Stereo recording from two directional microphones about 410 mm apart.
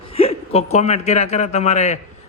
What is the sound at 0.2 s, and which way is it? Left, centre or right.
A man's voice, centre.